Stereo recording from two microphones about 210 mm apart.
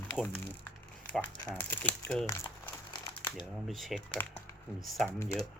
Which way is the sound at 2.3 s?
15° left (ahead or behind).